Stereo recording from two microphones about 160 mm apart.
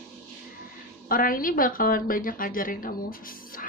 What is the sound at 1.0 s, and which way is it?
Speech, 60° left (ahead or behind).